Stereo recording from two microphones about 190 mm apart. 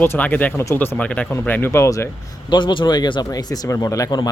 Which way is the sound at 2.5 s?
25° left (ahead or behind).